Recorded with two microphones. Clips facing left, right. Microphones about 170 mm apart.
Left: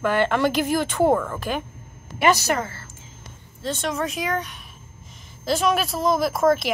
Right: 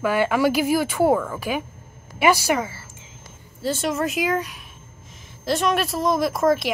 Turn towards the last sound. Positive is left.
turn(degrees=0)  # may be behind; listen again after turning